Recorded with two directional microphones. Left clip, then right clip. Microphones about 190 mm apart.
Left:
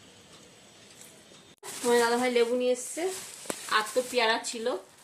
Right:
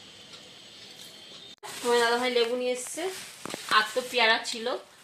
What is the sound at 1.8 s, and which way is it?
Speech, 25° left (ahead or behind).